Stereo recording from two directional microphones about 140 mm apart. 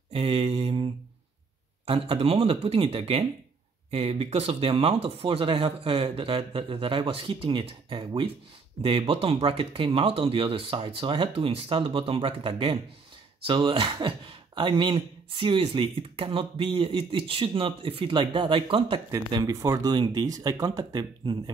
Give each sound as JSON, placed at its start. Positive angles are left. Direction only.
{"t": 0.1, "sound": "mantra", "side_deg": -40}
{"t": 1.9, "sound": "speech", "side_deg": -40}
{"t": 19.3, "sound": "speech", "side_deg": -25}